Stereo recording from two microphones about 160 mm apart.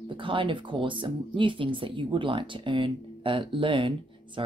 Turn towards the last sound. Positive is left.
turn(degrees=-30)  # may be behind; listen again after turning